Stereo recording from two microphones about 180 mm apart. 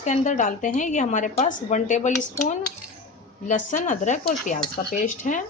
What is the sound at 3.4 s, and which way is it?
A woman's voice, 45° left (ahead or behind).